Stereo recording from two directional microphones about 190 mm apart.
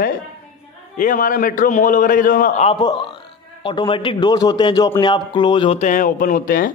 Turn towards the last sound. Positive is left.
turn(degrees=50)  # may be behind; listen again after turning